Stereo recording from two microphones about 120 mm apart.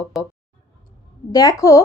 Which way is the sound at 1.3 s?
30° left (ahead or behind).